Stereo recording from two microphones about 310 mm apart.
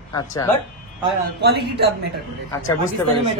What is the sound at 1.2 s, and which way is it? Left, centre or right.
Speech, right.